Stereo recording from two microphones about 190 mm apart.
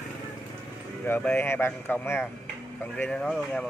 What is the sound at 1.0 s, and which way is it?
Speech, 10° left (ahead or behind).